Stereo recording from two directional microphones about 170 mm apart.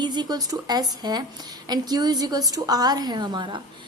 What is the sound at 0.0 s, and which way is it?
A woman's voice, 25° right (ahead or behind).